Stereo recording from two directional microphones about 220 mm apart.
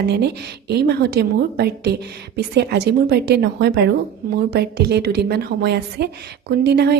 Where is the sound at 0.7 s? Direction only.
50° right (ahead or behind).